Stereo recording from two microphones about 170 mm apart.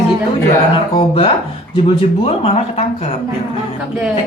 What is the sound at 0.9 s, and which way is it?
Speech, 35° left (ahead or behind).